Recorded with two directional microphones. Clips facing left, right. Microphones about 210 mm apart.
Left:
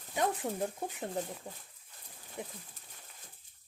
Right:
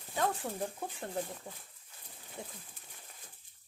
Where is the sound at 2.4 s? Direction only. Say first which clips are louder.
Left 3 dB; 20° left (ahead or behind).